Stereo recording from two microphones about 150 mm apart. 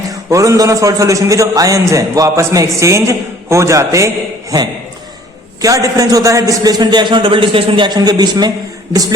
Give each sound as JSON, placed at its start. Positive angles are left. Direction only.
{"t": 0.1, "sound": "a man's voice", "side_deg": -20}
{"t": 5.6, "sound": "a man's voice", "side_deg": -25}